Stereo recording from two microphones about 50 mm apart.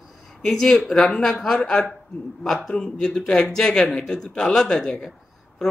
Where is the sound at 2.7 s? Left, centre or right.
Centre.